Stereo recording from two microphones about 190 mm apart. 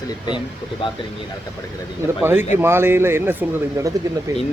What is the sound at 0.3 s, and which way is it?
Speech, 25° left (ahead or behind).